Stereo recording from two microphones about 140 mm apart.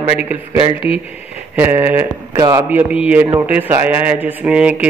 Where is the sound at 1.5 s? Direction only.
15° right (ahead or behind).